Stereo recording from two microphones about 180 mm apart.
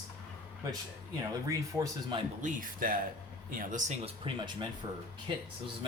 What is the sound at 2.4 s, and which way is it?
Speech, 45° right (ahead or behind).